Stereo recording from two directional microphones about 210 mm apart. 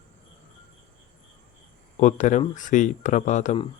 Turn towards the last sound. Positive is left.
turn(degrees=35)  # may be behind; listen again after turning